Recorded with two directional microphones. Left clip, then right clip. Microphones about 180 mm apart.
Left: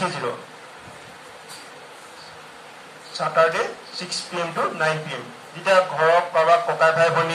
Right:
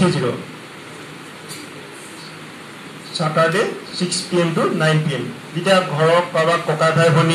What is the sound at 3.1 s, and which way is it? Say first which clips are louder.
Speech: right 2 dB; 35° right (ahead or behind).